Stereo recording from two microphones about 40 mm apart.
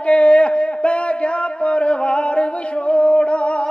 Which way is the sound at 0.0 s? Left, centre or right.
Left.